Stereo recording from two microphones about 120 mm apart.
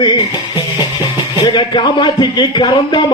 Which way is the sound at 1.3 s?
40° left (ahead or behind).